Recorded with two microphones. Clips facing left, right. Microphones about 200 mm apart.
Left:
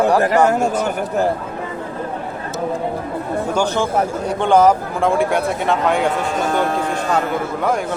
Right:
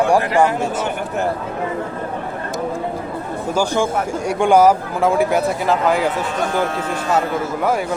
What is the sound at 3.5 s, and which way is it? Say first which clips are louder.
Speech: right 1 dB; 5° right (ahead or behind).